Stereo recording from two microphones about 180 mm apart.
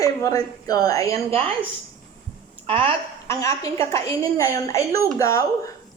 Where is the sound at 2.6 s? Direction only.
35° right (ahead or behind).